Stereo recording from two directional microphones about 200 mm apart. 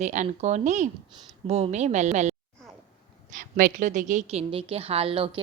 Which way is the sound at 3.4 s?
45° right (ahead or behind).